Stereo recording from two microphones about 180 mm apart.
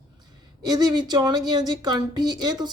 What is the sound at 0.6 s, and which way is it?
Speech, 20° right (ahead or behind).